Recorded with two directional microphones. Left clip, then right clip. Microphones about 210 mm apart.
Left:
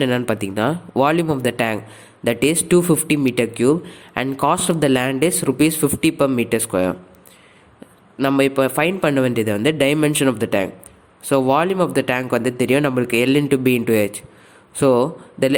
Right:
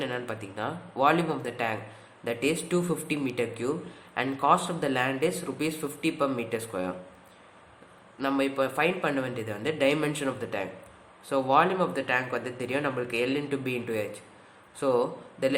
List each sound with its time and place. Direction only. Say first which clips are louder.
0.0 s speech: left 13 dB; 45° left (ahead or behind)
8.2 s a man's voice: left 10 dB; 45° left (ahead or behind)